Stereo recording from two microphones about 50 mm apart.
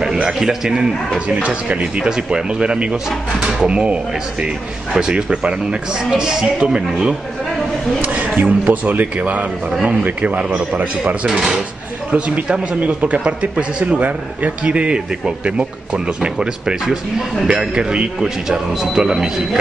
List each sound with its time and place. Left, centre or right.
0.3 s a man's voice: centre
8.0 s speech: right
11.2 s a man's voice: centre
12.1 s a man's voice: right